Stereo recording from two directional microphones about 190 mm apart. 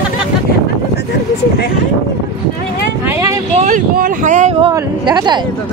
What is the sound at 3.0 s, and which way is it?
Vehicle, 15° right (ahead or behind).